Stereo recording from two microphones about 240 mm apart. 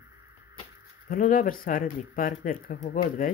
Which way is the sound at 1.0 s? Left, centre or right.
Left.